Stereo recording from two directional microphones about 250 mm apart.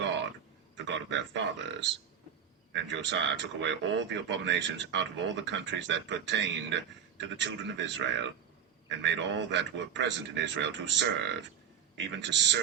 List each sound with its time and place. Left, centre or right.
0.8 s speech: right